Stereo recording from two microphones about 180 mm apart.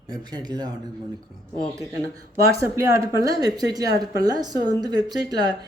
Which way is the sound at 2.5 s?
15° right (ahead or behind).